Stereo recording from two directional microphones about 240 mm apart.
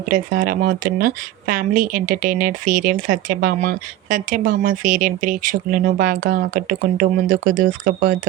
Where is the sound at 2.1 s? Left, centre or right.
Right.